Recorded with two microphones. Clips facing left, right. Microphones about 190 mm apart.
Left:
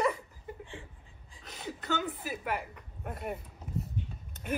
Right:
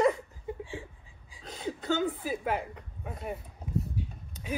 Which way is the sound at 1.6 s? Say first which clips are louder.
Right 5 dB; 25° right (ahead or behind).